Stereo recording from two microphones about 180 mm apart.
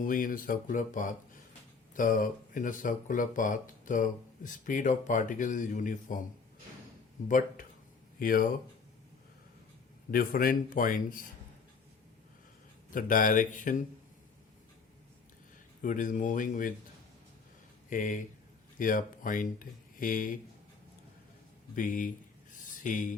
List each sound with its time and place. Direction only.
0.0 s speech: 50° left (ahead or behind)
7.3 s speech: 45° left (ahead or behind)
10.1 s speech: 55° left (ahead or behind)
12.9 s speech: 50° left (ahead or behind)
15.8 s speech: 45° left (ahead or behind)
17.8 s speech: 45° left (ahead or behind)
21.8 s speech: 50° left (ahead or behind)